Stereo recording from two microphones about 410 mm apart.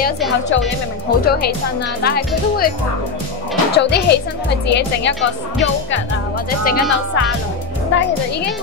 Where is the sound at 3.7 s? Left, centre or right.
Left.